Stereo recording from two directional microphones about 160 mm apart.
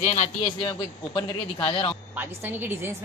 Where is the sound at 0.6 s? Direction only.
30° left (ahead or behind).